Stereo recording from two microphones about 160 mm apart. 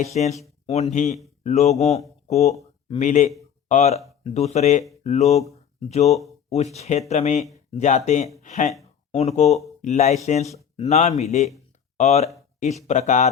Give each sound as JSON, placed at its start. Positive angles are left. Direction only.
{"t": 0.0, "sound": "speech", "side_deg": 45}